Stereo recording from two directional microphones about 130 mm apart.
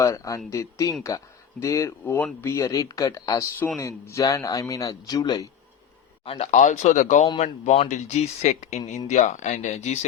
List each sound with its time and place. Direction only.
0.0 s speech: 25° left (ahead or behind)
6.2 s speech: 45° left (ahead or behind)
6.5 s speech: 70° left (ahead or behind)
7.3 s speech: 60° left (ahead or behind)